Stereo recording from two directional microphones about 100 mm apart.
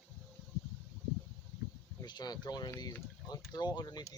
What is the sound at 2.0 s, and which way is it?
Speech, 45° left (ahead or behind).